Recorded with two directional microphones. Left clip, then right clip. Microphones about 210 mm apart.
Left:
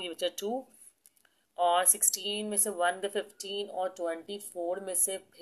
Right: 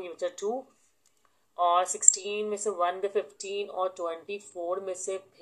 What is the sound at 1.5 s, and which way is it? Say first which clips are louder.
Speech: right 2 dB; 25° left (ahead or behind).